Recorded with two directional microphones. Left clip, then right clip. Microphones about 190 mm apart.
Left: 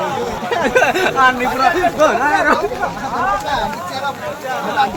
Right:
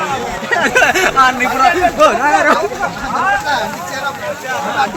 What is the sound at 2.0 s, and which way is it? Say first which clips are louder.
Speech: right 3 dB; 30° right (ahead or behind).